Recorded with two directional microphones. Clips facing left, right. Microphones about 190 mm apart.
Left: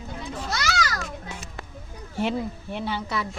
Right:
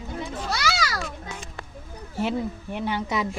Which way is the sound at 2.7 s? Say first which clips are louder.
Right 2 dB; 15° right (ahead or behind).